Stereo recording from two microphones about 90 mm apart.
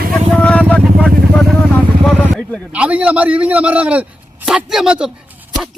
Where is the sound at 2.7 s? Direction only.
15° right (ahead or behind).